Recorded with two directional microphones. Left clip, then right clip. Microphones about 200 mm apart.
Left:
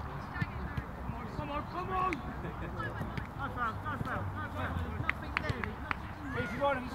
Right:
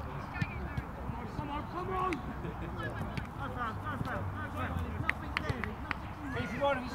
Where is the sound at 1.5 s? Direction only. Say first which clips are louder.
Left 1 dB; 30° left (ahead or behind).